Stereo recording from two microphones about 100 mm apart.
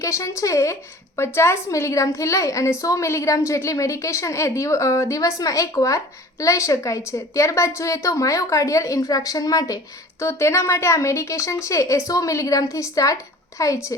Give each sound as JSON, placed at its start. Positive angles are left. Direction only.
{"t": 0.0, "sound": "a woman's voice", "side_deg": 30}